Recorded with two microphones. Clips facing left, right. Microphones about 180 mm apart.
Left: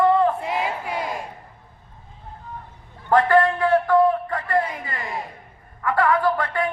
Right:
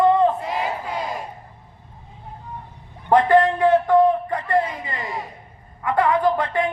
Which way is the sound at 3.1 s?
20° right (ahead or behind).